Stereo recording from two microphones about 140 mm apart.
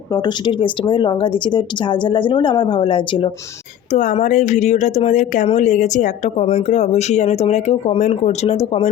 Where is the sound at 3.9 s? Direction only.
60° left (ahead or behind).